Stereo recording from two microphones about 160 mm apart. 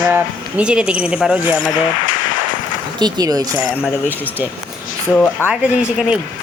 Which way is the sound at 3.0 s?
25° right (ahead or behind).